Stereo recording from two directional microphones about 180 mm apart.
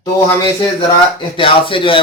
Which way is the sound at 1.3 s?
30° left (ahead or behind).